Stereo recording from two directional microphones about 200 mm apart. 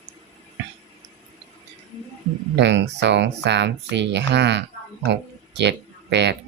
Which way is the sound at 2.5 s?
60° right (ahead or behind).